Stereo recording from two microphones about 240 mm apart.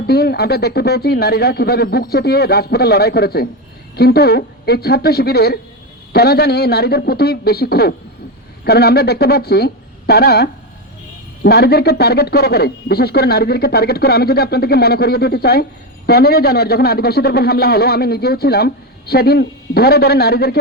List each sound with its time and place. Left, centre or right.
0.1 s a man's voice: left